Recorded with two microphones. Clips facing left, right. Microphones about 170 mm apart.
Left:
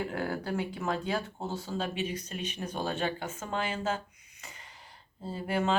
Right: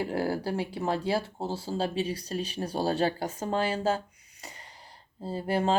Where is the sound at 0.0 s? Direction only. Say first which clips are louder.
Right 4 dB; 35° right (ahead or behind).